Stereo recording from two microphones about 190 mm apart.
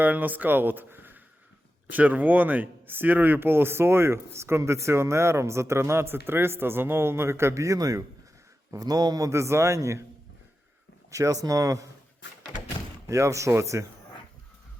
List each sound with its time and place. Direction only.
0.0 s speech: 10° right (ahead or behind)
11.1 s speech: 15° right (ahead or behind)
13.1 s speech: 15° right (ahead or behind)